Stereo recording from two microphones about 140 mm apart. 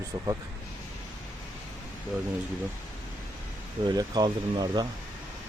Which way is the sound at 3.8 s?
30° right (ahead or behind).